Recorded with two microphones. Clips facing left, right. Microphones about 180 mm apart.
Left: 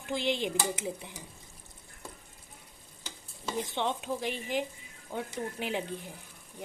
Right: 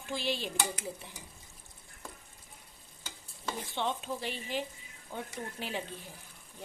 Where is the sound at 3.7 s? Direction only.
15° left (ahead or behind).